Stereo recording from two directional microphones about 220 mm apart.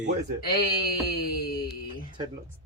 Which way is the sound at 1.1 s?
45° left (ahead or behind).